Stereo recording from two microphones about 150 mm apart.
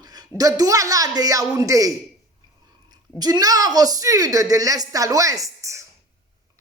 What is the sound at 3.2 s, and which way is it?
A woman's voice, 25° right (ahead or behind).